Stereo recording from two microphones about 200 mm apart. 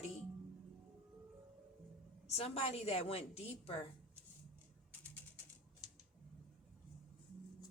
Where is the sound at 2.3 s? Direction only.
30° left (ahead or behind).